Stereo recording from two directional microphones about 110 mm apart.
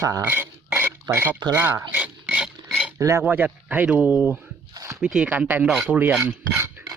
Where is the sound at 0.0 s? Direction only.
30° right (ahead or behind).